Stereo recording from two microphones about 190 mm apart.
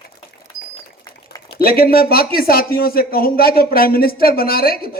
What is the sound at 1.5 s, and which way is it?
Speech, 50° left (ahead or behind).